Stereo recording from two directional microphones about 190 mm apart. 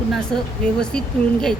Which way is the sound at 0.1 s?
5° left (ahead or behind).